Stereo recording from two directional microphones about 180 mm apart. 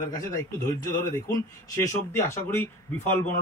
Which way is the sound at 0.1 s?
20° left (ahead or behind).